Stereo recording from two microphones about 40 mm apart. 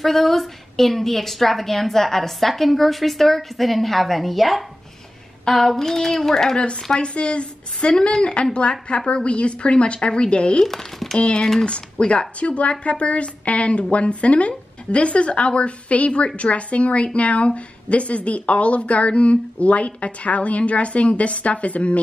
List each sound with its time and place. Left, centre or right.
0.0 s a woman's voice: centre
5.5 s a sound: centre
6.5 s a woman's voice: left
10.6 s speech: centre
11.1 s a woman's voice: left